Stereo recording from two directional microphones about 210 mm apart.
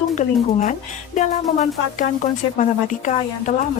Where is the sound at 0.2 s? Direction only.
35° left (ahead or behind).